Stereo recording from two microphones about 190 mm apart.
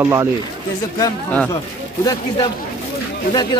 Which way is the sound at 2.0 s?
20° left (ahead or behind).